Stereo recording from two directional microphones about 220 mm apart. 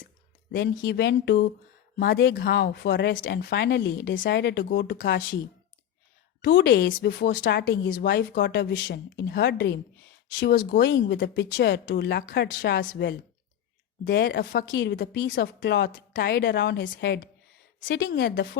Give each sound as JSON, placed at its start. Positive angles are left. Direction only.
{"t": 0.9, "sound": "speech", "side_deg": 50}
{"t": 6.4, "sound": "a woman's voice", "side_deg": 50}